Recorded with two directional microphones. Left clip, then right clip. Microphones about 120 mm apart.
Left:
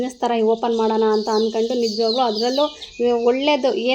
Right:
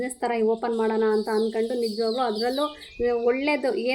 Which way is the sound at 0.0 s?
20° left (ahead or behind).